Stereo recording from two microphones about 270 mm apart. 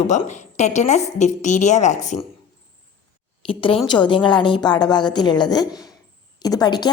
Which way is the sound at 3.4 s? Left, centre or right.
Left.